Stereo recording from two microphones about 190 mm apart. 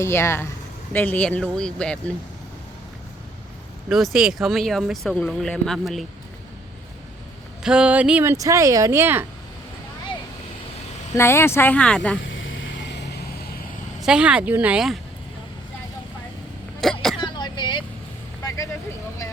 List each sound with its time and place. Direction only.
0.0 s speech: 15° left (ahead or behind)
3.8 s speech: centre (ahead or behind)
7.6 s speech: 5° right (ahead or behind)
11.1 s speech: 15° left (ahead or behind)
12.2 s a sound: 90° left; by 13.0 s 70° left (ahead or behind)
14.0 s speech: 5° right (ahead or behind)
16.8 s throat clearing: centre (ahead or behind)
17.2 s throat clearing: 25° left (ahead or behind)
18.4 s vehicle: 15° left (ahead or behind)